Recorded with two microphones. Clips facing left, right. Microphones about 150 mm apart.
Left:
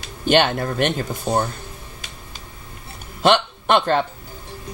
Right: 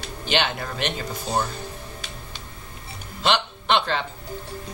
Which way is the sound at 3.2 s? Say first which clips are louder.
Left 6 dB; 50° left (ahead or behind).